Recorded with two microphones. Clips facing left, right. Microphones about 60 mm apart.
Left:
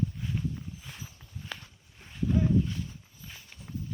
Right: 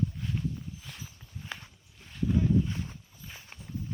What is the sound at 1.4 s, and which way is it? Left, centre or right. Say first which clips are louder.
Walk: even; centre.